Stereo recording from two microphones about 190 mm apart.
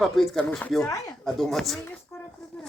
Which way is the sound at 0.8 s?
15° left (ahead or behind).